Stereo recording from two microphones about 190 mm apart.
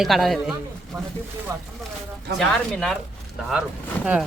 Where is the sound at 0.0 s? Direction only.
Centre (ahead or behind).